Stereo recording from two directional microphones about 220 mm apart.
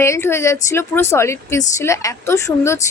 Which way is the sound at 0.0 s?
10° left (ahead or behind).